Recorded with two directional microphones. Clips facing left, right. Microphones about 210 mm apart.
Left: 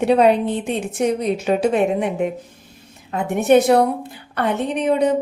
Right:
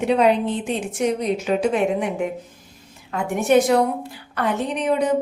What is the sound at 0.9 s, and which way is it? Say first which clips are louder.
A woman's voice: left 2 dB; 30° left (ahead or behind).